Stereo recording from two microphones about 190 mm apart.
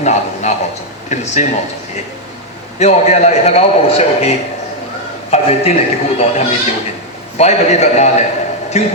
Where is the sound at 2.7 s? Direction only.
35° left (ahead or behind).